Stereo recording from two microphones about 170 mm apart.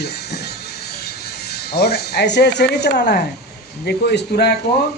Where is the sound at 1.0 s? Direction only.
70° left (ahead or behind).